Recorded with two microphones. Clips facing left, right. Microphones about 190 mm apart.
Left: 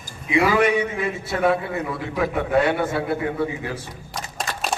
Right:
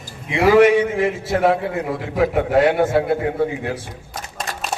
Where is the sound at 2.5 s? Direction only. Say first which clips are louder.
Right 4 dB; 50° right (ahead or behind).